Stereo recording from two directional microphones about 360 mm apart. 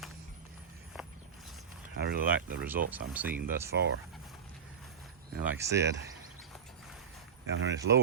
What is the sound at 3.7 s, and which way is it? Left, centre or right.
Speech, right.